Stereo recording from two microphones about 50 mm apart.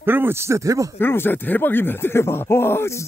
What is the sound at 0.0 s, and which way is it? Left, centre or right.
Speech, right.